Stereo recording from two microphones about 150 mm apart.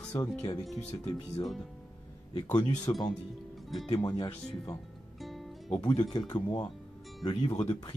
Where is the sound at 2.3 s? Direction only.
30° left (ahead or behind).